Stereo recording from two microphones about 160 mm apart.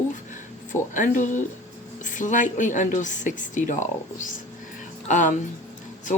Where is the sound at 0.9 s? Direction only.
55° left (ahead or behind).